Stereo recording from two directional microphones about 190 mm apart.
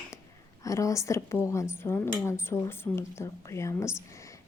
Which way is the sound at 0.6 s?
15° left (ahead or behind).